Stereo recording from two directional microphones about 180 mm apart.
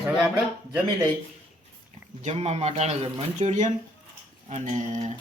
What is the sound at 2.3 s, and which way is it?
Speech, 35° right (ahead or behind).